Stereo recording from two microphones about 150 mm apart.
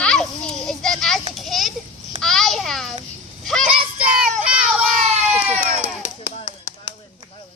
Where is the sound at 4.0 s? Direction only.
5° right (ahead or behind).